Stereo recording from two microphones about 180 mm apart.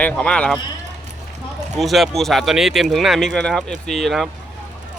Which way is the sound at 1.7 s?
Centre (ahead or behind).